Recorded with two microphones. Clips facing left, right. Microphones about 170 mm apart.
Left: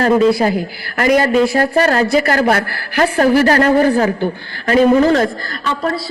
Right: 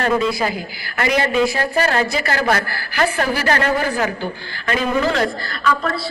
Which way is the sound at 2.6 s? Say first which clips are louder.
Left 5 dB; 60° left (ahead or behind).